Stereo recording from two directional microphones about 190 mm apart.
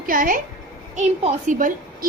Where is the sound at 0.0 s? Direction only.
45° right (ahead or behind).